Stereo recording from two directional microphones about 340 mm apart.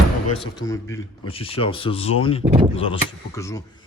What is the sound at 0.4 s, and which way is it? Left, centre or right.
Speech, centre.